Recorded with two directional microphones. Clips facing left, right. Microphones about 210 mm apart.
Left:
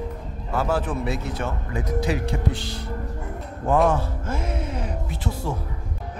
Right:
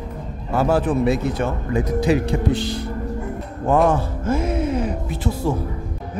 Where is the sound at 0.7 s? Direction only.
15° right (ahead or behind).